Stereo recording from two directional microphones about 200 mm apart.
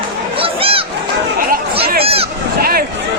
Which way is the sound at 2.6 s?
45° right (ahead or behind).